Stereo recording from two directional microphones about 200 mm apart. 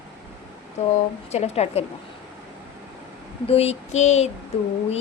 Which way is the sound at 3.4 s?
30° left (ahead or behind).